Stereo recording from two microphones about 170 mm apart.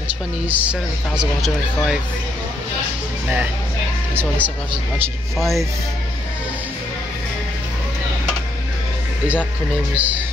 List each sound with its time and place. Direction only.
0.5 s speech: 10° right (ahead or behind)
4.1 s speech: 10° right (ahead or behind)
9.9 s speech: 10° right (ahead or behind)